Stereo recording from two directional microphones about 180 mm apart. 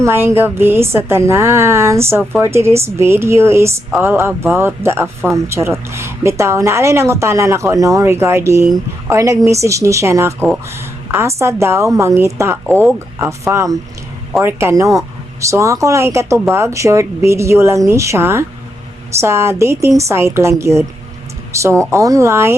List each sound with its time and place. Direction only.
0.0 s a woman's voice: 15° right (ahead or behind)